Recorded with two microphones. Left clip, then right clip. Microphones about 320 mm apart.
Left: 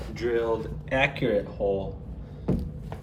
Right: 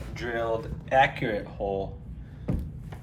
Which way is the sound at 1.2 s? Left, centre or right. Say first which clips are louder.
Left 4 dB; right.